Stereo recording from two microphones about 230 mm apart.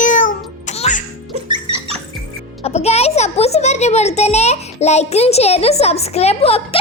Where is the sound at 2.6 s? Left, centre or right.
Left.